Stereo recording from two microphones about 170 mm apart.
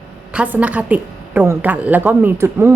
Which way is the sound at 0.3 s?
10° right (ahead or behind).